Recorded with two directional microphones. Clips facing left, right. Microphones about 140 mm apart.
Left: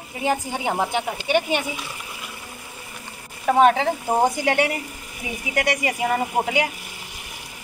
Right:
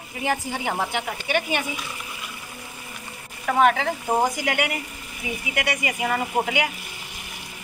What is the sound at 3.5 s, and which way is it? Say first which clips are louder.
Speech: left 3 dB; 30° left (ahead or behind).